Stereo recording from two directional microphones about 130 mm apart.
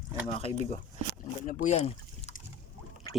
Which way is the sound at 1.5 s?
60° left (ahead or behind).